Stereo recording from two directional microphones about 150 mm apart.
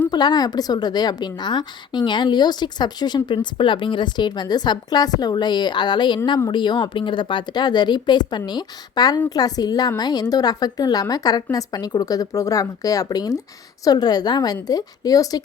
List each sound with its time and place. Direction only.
0.1 s a woman's voice: 30° left (ahead or behind)